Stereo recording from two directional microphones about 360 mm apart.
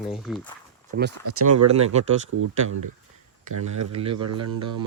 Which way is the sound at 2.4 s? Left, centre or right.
Right.